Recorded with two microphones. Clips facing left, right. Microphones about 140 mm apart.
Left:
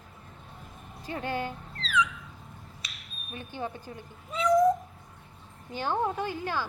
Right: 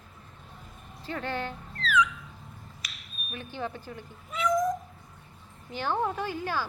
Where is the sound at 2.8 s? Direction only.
20° left (ahead or behind).